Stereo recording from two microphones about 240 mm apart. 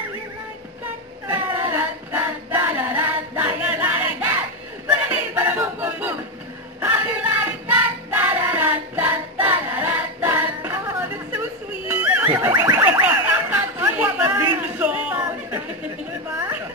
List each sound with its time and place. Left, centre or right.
1.3 s female singing: centre
4.8 s battle cry: centre
6.8 s music: centre
11.9 s a sound: centre